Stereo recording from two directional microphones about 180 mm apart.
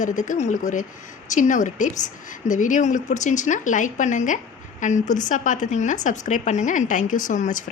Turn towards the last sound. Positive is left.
turn(degrees=45)  # may be behind; listen again after turning